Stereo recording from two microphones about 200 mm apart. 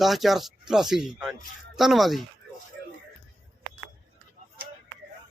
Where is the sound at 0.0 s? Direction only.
Centre (ahead or behind).